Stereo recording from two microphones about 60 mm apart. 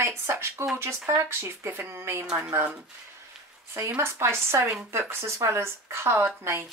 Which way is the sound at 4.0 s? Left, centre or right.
Right.